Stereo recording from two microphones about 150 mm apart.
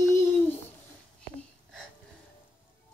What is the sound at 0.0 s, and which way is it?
Babbling, 20° left (ahead or behind).